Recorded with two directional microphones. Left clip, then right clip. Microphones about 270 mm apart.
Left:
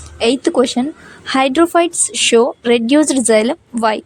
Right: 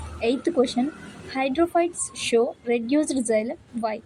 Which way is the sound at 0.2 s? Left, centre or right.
Left.